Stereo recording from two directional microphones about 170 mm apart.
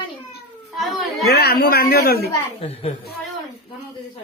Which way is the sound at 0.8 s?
Centre (ahead or behind).